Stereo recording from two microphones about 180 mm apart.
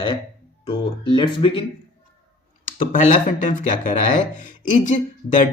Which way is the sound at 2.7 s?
45° left (ahead or behind).